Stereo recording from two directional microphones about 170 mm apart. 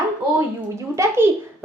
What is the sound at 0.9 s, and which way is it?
Speech, 15° right (ahead or behind).